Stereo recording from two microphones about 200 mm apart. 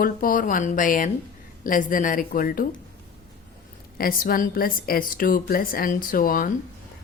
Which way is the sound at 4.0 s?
45° left (ahead or behind).